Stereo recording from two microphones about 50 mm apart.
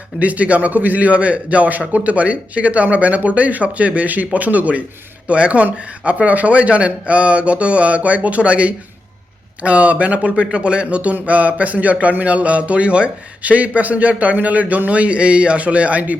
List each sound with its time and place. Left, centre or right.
0.2 s a man's voice: right